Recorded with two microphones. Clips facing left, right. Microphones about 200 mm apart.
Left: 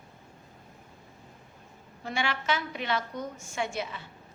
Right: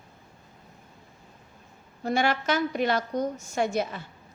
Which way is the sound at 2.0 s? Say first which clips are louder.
Right 7 dB; 40° right (ahead or behind).